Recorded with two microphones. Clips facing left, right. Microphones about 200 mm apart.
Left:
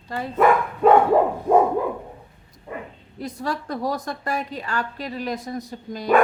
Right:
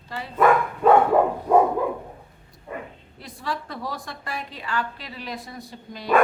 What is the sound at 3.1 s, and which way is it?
A woman's voice, 45° left (ahead or behind).